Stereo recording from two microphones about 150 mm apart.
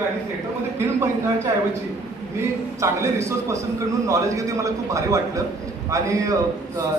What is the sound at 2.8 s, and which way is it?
A man's voice, 20° right (ahead or behind).